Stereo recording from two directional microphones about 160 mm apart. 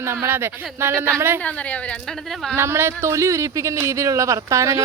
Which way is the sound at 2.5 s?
15° right (ahead or behind).